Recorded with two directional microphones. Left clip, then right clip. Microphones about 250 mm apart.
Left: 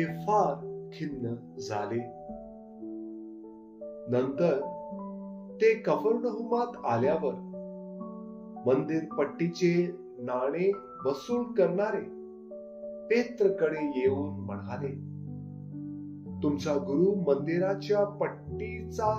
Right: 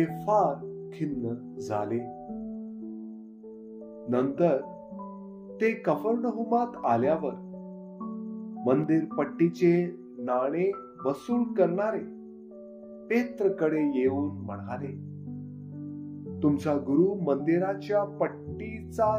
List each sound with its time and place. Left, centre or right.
0.0 s speech: right
5.6 s speech: right
8.6 s speech: right
13.1 s speech: right
16.3 s speech: right